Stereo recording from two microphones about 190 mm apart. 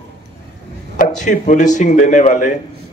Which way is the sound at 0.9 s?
45° left (ahead or behind).